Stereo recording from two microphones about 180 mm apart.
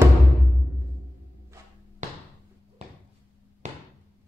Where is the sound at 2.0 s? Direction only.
40° right (ahead or behind).